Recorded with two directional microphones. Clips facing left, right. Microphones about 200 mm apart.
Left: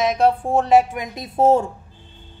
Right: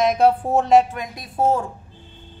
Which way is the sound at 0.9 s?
20° left (ahead or behind).